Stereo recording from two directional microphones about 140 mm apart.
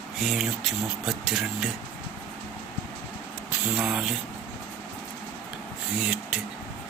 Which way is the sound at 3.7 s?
5° right (ahead or behind).